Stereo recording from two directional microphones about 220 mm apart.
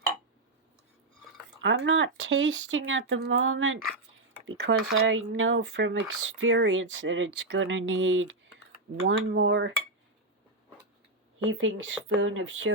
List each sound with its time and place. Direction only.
1.6 s speech: 60° right (ahead or behind)
4.4 s speech: 55° right (ahead or behind)
11.4 s speech: 60° right (ahead or behind)